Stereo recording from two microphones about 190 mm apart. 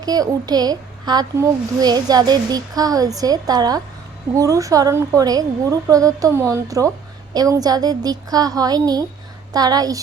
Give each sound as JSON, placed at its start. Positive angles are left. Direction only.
{"t": 0.0, "sound": "a child's voice", "side_deg": -20}